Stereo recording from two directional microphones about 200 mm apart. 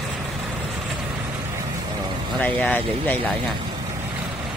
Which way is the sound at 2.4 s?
10° left (ahead or behind).